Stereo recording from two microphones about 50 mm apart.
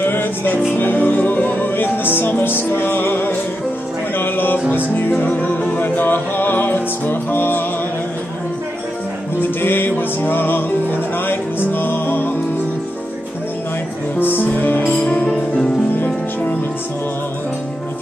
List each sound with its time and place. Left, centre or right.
0.0 s music: left
5.1 s music: left
9.4 s music: left
14.2 s music: left
14.9 s music: left
15.9 s music: left